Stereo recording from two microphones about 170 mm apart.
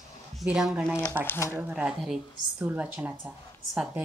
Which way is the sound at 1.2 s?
15° left (ahead or behind).